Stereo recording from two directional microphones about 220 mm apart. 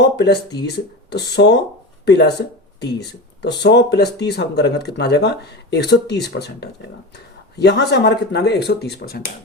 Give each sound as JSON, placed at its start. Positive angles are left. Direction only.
{"t": 0.0, "sound": "speech", "side_deg": 50}
{"t": 3.4, "sound": "speech", "side_deg": 50}